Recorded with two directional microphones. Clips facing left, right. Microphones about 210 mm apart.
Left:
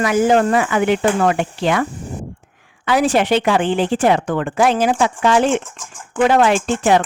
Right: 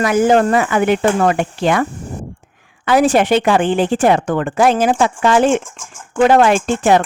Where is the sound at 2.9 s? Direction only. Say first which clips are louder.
Right 3 dB; 50° right (ahead or behind).